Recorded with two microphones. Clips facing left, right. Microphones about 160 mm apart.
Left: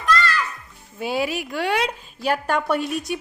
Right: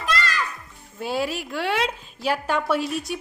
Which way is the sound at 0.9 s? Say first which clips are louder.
Left 2 dB; centre (ahead or behind).